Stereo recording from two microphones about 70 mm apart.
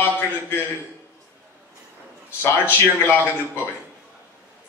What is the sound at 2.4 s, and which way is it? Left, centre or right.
Speech, left.